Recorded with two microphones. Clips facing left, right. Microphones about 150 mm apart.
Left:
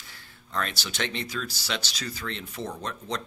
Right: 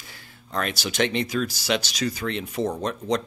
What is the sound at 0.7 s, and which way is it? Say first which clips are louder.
Speech: right 8 dB; 15° right (ahead or behind).